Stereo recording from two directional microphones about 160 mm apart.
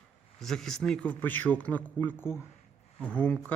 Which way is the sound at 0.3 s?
Centre (ahead or behind).